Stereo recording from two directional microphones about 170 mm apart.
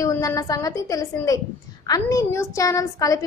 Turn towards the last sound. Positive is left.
turn(degrees=20)  # may be behind; listen again after turning